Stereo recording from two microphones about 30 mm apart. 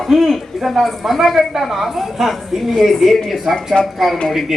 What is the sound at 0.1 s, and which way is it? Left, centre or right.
A woman's voice, centre.